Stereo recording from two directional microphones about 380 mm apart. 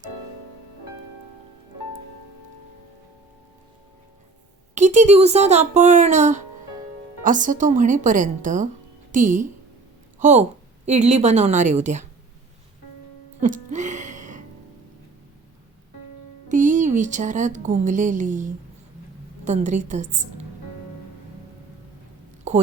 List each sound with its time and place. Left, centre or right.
4.7 s a woman's voice: centre
13.4 s music: centre
16.5 s a woman's voice: centre
22.5 s a sound: centre